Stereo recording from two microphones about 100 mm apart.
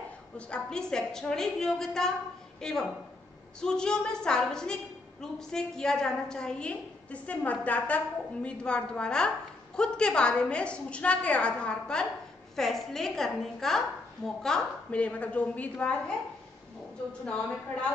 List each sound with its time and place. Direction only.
0.5 s a woman's voice: 5° left (ahead or behind)